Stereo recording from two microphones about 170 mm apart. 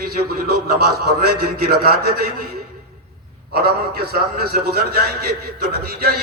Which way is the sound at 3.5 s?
65° right (ahead or behind).